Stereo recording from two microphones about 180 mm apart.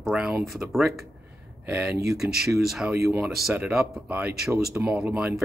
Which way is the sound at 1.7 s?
10° right (ahead or behind).